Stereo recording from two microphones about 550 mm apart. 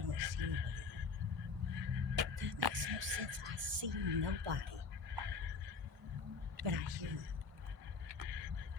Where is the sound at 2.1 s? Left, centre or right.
Right.